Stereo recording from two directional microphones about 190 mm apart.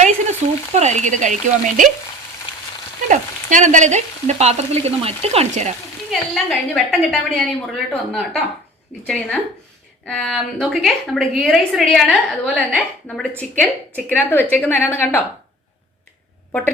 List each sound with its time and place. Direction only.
0.7 s frying: 35° right (ahead or behind)
3.1 s frying: 40° right (ahead or behind)
6.1 s a woman's voice: centre (ahead or behind)
16.5 s a woman's voice: 10° left (ahead or behind)